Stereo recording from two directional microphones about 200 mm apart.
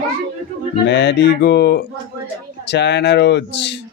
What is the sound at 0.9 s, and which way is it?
A man's voice, 60° left (ahead or behind).